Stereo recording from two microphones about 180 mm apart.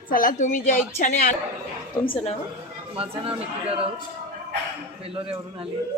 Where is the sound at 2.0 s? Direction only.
20° left (ahead or behind).